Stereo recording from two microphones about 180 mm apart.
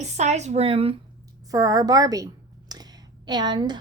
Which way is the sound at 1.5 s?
20° right (ahead or behind).